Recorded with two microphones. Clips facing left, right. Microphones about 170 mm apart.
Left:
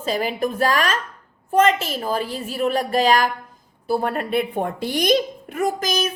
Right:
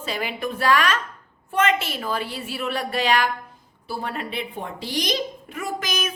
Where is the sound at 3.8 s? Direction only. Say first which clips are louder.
Left 8 dB; 50° left (ahead or behind); by 6.1 s 35° left (ahead or behind).